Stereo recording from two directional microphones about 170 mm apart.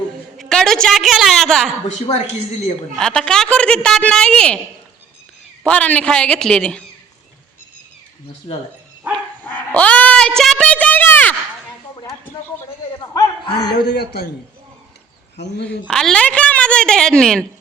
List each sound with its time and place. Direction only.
0.3 s a woman's voice: centre (ahead or behind)
2.9 s a woman's voice: 5° left (ahead or behind)
5.6 s a man's voice: 10° left (ahead or behind)
8.5 s speech: 35° left (ahead or behind)
9.1 s bow-wow: 10° left (ahead or behind)
13.1 s a sound: 30° left (ahead or behind)
13.8 s a man's voice: 70° left (ahead or behind)
15.9 s a woman's voice: 5° left (ahead or behind)